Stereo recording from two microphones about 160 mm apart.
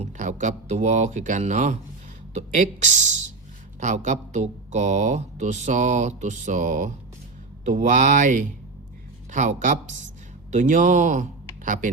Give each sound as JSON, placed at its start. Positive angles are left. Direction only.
{"t": 0.0, "sound": "speech", "side_deg": -50}